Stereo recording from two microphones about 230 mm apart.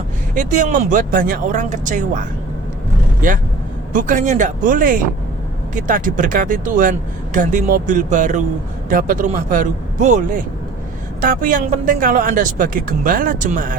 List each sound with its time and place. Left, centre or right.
0.3 s speech: right